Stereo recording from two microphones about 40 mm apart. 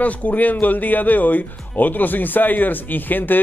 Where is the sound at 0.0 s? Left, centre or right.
Left.